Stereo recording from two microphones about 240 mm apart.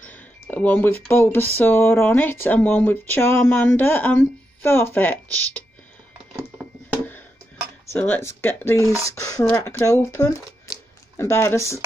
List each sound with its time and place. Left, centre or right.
0.0 s speech: centre
7.9 s speech: centre